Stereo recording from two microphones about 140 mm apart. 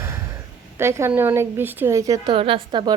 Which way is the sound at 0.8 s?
20° right (ahead or behind).